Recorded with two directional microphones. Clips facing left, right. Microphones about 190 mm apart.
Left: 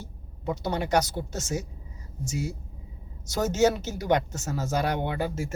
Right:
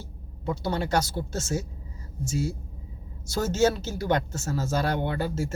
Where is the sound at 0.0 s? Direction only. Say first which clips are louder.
Even; 15° left (ahead or behind).